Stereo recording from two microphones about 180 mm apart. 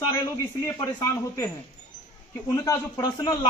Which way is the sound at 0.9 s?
15° left (ahead or behind).